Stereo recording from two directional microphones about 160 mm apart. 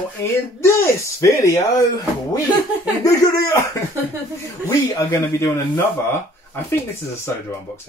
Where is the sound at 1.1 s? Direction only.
20° left (ahead or behind).